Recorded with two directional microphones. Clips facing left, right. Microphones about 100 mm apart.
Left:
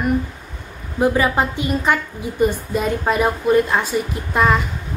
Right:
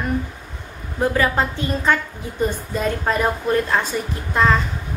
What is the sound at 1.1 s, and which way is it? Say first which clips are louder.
A woman's voice: left 1 dB; 15° left (ahead or behind).